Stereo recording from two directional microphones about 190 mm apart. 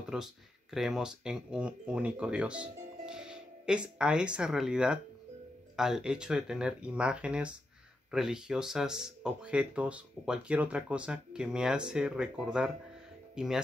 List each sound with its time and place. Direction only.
0.1 s speech: 5° right (ahead or behind)